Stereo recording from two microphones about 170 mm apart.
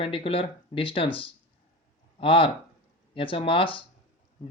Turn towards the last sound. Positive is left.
turn(degrees=30)  # may be behind; listen again after turning